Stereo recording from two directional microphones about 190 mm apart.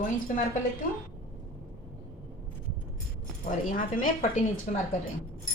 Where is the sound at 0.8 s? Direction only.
45° left (ahead or behind).